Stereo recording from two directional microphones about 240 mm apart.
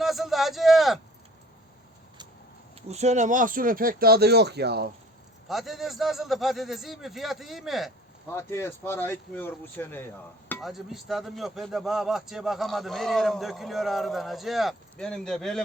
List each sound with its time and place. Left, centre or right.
0.0 s a sound: centre
2.9 s speech: right
5.5 s speech: centre
8.3 s speech: centre